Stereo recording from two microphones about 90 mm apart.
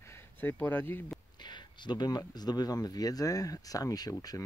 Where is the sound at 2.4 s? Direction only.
50° left (ahead or behind).